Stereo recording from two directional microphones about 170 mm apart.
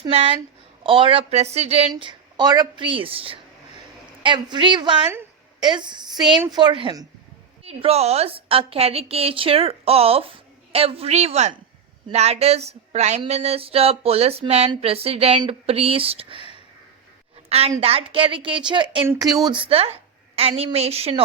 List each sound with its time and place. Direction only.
0.0 s a woman's voice: 35° right (ahead or behind)
1.9 s a woman's voice: 25° right (ahead or behind)
17.5 s a woman's voice: 35° right (ahead or behind)